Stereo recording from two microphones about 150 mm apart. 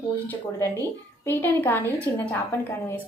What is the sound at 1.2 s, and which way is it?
A woman's voice, 15° left (ahead or behind).